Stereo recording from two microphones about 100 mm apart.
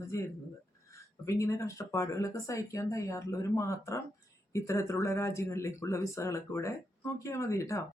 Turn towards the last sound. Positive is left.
turn(degrees=30)  # may be behind; listen again after turning